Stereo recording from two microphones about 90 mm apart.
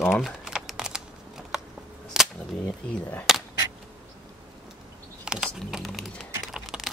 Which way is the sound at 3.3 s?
5° right (ahead or behind).